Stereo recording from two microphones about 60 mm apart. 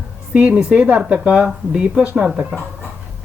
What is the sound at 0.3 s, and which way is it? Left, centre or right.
Speech, right.